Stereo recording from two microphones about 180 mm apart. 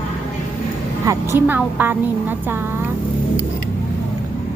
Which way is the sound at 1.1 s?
15° right (ahead or behind).